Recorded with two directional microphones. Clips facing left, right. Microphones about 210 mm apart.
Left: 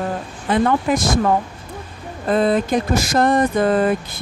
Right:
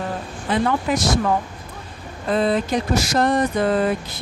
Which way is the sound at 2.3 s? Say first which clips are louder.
Left 3 dB; 50° left (ahead or behind).